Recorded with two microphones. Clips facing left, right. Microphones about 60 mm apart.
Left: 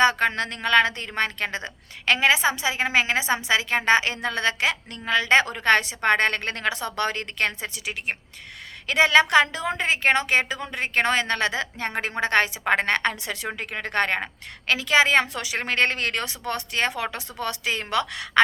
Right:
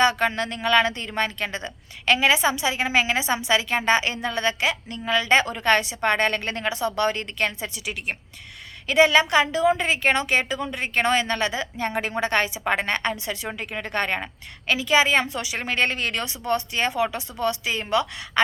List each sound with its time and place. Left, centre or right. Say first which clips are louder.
0.0 s a woman's voice: even; left
9.8 s a woman's voice: even; left